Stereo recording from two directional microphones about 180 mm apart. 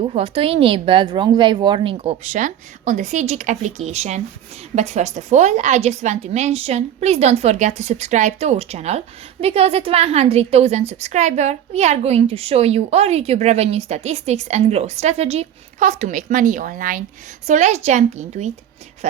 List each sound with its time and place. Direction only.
0.0 s a woman's voice: 35° right (ahead or behind)